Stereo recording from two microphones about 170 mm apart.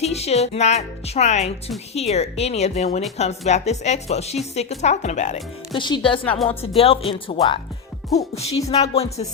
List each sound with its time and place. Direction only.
0.0 s a woman's voice: 40° left (ahead or behind)
5.7 s a woman's voice: 30° left (ahead or behind)